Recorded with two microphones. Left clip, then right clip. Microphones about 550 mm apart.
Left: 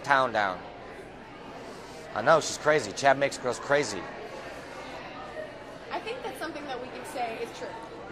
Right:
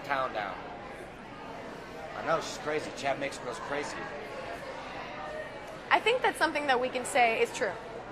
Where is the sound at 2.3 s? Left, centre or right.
Left.